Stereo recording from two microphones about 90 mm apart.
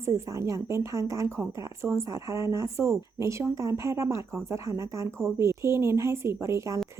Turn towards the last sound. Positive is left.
turn(degrees=-35)  # may be behind; listen again after turning